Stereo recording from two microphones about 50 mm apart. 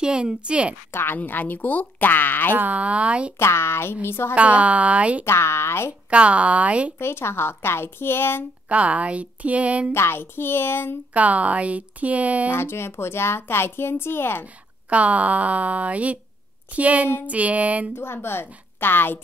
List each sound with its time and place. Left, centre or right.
0.0 s speech: centre
0.9 s speech: left
2.5 s speech: right
3.3 s a woman's voice: left
4.4 s speech: right
5.2 s a woman's voice: left
6.0 s speech: right
7.0 s a woman's voice: left
8.6 s speech: right
9.9 s a woman's voice: left
11.1 s speech: right
12.5 s a woman's voice: left
14.4 s speech: right
17.9 s a woman's voice: left